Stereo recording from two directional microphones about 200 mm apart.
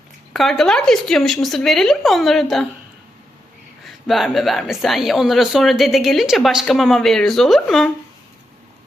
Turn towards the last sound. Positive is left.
turn(degrees=0)  # may be behind; listen again after turning